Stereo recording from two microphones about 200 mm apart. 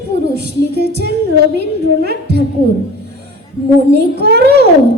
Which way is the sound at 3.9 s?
55° right (ahead or behind).